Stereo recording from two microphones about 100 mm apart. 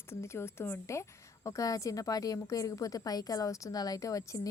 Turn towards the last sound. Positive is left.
turn(degrees=35)  # may be behind; listen again after turning